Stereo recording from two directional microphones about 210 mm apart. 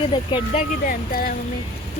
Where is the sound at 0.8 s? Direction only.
45° left (ahead or behind).